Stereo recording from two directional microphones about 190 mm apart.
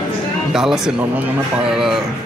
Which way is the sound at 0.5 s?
Centre (ahead or behind).